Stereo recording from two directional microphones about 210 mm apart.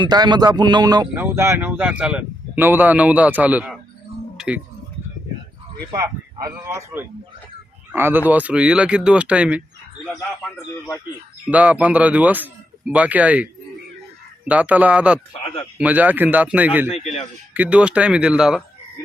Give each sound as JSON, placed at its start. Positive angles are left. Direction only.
{"t": 0.0, "sound": "speech", "side_deg": -20}
{"t": 4.4, "sound": "a sound", "side_deg": -5}
{"t": 5.9, "sound": "speech", "side_deg": -15}
{"t": 10.2, "sound": "a man's voice", "side_deg": 10}
{"t": 11.4, "sound": "speech", "side_deg": -5}
{"t": 15.3, "sound": "speech", "side_deg": 25}
{"t": 15.8, "sound": "speech", "side_deg": -10}
{"t": 16.9, "sound": "speech", "side_deg": 30}
{"t": 17.5, "sound": "speech", "side_deg": -5}